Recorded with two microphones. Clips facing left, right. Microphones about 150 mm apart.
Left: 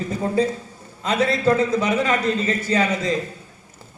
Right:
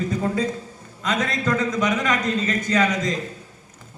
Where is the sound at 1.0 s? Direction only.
30° left (ahead or behind).